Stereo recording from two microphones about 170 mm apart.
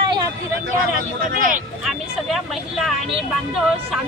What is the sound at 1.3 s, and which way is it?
Speech, 50° right (ahead or behind).